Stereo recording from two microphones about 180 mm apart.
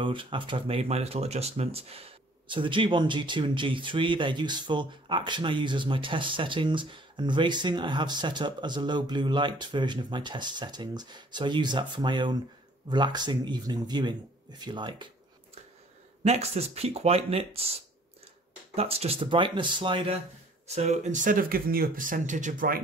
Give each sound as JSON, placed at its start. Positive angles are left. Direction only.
{"t": 0.0, "sound": "speech", "side_deg": -25}
{"t": 16.3, "sound": "speech", "side_deg": -35}
{"t": 18.8, "sound": "speech", "side_deg": -35}